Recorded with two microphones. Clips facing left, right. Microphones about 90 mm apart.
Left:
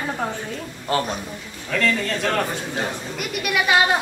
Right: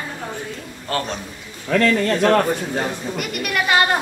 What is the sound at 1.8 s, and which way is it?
Speech, 55° right (ahead or behind).